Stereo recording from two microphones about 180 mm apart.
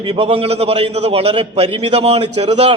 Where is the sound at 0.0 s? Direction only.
30° right (ahead or behind).